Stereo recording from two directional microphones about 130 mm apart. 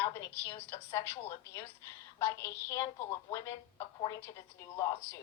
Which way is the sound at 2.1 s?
20° left (ahead or behind).